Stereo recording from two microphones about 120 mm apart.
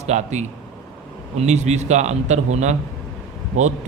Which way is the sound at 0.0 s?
70° right (ahead or behind).